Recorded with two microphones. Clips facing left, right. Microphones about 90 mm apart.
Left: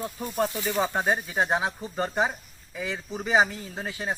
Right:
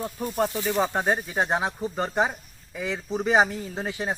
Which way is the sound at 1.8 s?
15° right (ahead or behind).